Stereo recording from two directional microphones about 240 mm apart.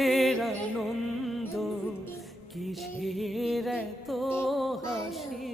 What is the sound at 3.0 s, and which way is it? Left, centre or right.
Music, centre.